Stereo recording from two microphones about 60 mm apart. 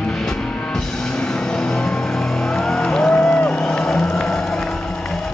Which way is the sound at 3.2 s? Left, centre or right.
Left.